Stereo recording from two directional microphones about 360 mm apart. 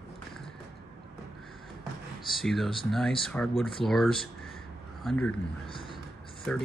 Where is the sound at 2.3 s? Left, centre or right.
Centre.